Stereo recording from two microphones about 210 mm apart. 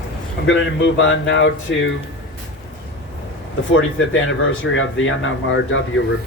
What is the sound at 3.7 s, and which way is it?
Speech, 70° left (ahead or behind).